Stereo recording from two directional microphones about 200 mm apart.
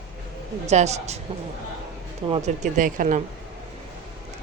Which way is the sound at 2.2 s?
30° right (ahead or behind).